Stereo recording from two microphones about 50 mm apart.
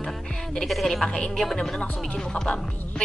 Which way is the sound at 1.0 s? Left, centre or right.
Left.